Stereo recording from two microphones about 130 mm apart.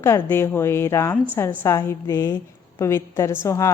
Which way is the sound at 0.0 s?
20° left (ahead or behind).